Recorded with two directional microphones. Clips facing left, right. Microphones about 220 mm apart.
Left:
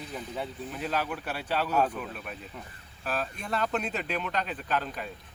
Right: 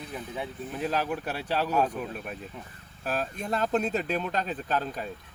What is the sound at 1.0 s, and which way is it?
Speech, 40° right (ahead or behind).